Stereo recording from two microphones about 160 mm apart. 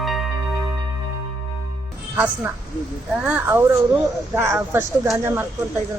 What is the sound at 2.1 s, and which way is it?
Speech, 10° right (ahead or behind).